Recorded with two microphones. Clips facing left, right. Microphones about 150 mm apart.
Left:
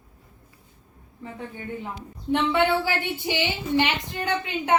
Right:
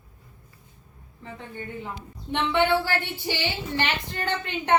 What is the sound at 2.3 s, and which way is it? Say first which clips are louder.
A woman's voice: left 1 dB; 5° left (ahead or behind).